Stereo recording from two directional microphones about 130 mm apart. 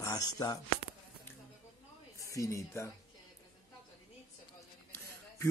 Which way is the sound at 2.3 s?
25° left (ahead or behind).